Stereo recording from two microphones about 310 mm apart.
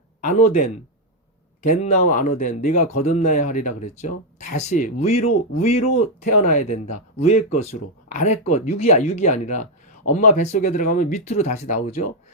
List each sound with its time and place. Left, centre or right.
0.2 s speech: left
5.1 s speech: left
5.6 s speech: left